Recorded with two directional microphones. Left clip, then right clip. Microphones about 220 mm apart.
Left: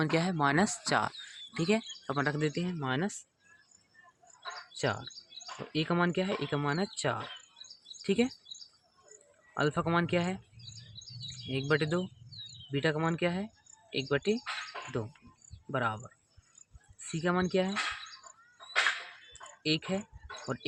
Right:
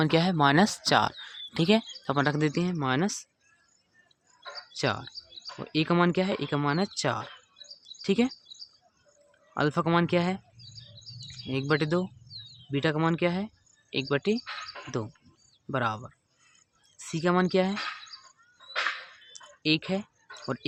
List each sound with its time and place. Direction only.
0.0 s speech: 20° right (ahead or behind); by 3.2 s 35° right (ahead or behind)
4.8 s a sound: 30° right (ahead or behind)
5.5 s speech: 35° right (ahead or behind)
9.6 s speech: 30° right (ahead or behind)
14.4 s bird: 45° left (ahead or behind)
15.7 s speech: 30° right (ahead or behind)
19.6 s speech: 30° right (ahead or behind)